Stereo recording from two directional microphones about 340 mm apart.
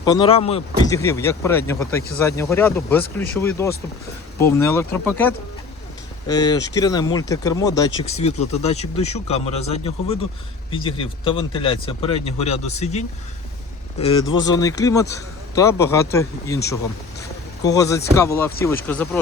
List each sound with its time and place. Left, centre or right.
0.0 s speech: centre
17.6 s speech: centre